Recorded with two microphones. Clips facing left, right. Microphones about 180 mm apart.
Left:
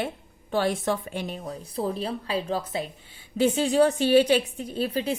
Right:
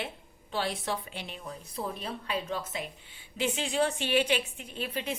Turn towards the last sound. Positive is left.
turn(degrees=35)  # may be behind; listen again after turning